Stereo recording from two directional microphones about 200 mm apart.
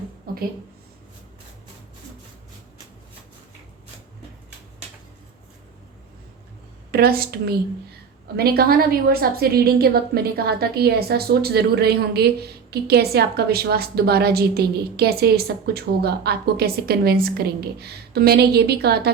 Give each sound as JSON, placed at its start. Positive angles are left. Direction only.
{"t": 6.9, "sound": "a woman's voice", "side_deg": -50}